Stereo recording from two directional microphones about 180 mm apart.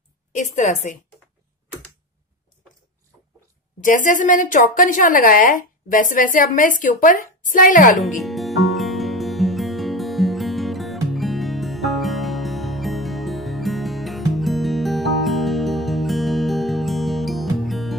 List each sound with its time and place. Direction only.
0.4 s a woman's voice: 40° left (ahead or behind)
3.8 s a woman's voice: 45° left (ahead or behind)
8.0 s music: centre (ahead or behind)